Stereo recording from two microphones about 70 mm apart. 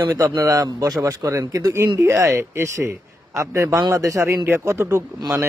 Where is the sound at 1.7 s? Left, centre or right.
Right.